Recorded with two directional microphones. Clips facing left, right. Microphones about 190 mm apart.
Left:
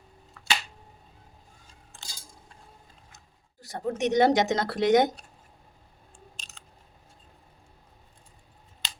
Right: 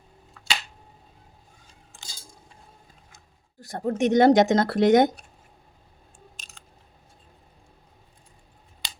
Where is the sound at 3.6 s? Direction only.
50° right (ahead or behind).